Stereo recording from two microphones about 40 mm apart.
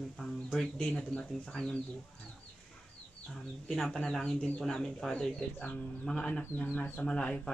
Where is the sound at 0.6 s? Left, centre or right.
Centre.